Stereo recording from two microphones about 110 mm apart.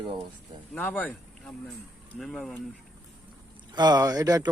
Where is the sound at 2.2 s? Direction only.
5° left (ahead or behind).